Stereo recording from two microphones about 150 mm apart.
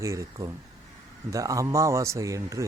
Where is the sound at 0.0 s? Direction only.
20° right (ahead or behind).